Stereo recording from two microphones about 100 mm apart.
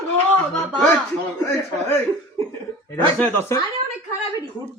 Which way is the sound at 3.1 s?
15° left (ahead or behind).